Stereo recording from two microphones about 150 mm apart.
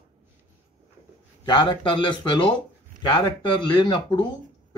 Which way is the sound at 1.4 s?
30° left (ahead or behind).